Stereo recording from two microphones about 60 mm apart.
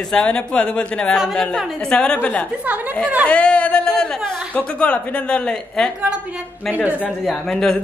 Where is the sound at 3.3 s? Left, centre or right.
Centre.